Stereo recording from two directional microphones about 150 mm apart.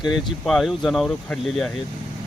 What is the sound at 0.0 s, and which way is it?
Speech, centre (ahead or behind).